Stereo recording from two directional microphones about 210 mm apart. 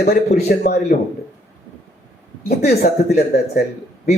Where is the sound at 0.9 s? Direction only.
45° left (ahead or behind).